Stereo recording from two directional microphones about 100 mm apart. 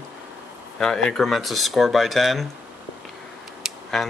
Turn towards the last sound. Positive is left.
turn(degrees=0)  # may be behind; listen again after turning